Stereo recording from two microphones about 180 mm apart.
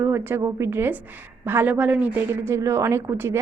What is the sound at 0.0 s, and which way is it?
A woman's voice, 10° right (ahead or behind).